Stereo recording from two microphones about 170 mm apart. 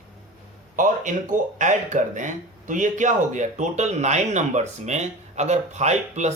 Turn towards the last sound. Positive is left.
turn(degrees=-40)  # may be behind; listen again after turning